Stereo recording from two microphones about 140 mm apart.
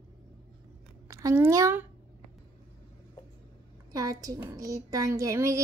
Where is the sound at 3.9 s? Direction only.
25° right (ahead or behind).